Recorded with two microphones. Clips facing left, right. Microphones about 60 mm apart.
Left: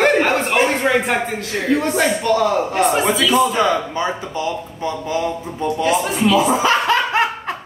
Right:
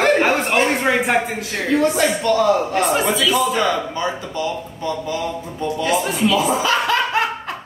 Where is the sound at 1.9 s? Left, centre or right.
Centre.